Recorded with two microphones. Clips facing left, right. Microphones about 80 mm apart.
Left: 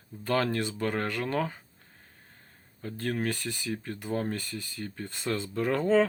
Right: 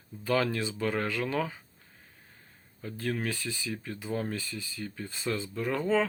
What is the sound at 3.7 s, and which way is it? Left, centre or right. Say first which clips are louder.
Speech: left 3 dB; left.